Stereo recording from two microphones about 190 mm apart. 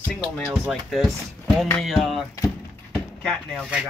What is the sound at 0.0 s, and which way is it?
Speech, 5° left (ahead or behind).